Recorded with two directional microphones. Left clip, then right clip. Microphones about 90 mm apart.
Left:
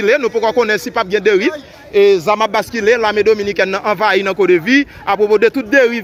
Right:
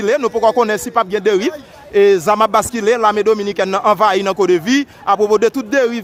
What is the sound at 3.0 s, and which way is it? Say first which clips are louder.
Speech: left 1 dB; 40° right (ahead or behind).